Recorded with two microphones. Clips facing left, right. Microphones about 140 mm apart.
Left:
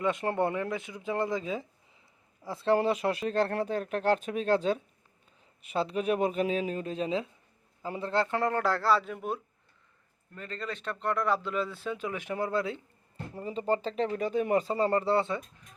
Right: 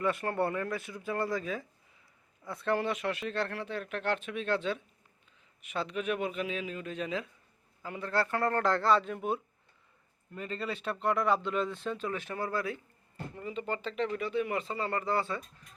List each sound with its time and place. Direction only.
0.0 s speech: 20° left (ahead or behind)
8.5 s speech: 5° left (ahead or behind)
10.3 s speech: 10° right (ahead or behind); by 12.8 s 25° left (ahead or behind)
13.3 s speech: 35° left (ahead or behind)